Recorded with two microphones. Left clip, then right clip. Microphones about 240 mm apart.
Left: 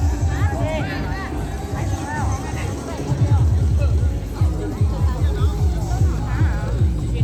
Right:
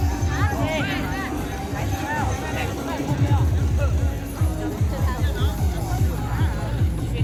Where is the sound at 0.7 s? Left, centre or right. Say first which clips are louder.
Even; centre.